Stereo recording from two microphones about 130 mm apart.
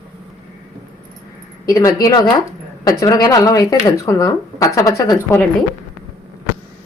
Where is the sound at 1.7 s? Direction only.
25° left (ahead or behind).